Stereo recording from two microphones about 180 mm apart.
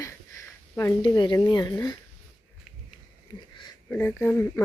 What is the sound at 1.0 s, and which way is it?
Speech, 25° left (ahead or behind).